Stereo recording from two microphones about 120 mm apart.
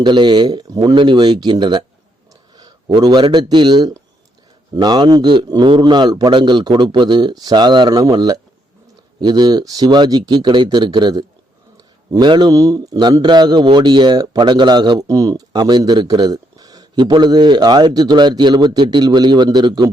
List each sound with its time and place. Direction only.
0.0 s a man's voice: 40° right (ahead or behind)